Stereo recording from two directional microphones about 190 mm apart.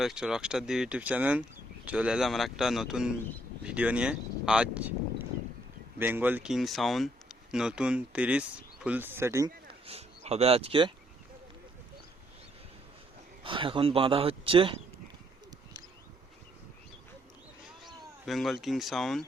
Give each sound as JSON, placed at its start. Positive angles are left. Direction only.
{"t": 0.0, "sound": "speech", "side_deg": -5}
{"t": 6.0, "sound": "speech", "side_deg": -10}
{"t": 9.8, "sound": "speech", "side_deg": -35}
{"t": 13.4, "sound": "speech", "side_deg": -25}
{"t": 18.3, "sound": "speech", "side_deg": 0}